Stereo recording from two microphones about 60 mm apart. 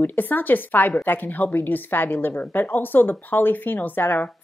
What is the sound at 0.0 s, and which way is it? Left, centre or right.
A woman's voice, left.